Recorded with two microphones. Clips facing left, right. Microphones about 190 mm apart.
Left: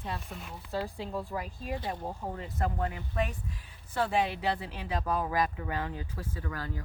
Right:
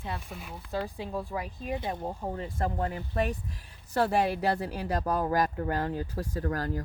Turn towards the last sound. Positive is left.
turn(degrees=-45)  # may be behind; listen again after turning